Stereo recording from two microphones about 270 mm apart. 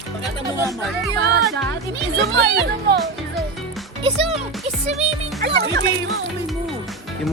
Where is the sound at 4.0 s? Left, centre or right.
Right.